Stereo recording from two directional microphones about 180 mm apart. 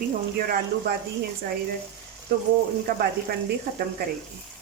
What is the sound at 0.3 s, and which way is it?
Speech, 55° right (ahead or behind).